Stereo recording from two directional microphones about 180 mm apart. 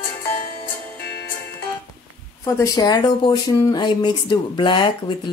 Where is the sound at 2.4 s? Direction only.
20° left (ahead or behind).